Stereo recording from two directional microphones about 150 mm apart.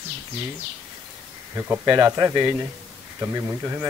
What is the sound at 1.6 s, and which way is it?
Speech, 20° right (ahead or behind).